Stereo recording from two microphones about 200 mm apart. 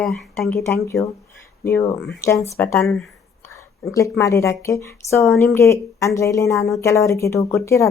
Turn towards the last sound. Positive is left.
turn(degrees=15)  # may be behind; listen again after turning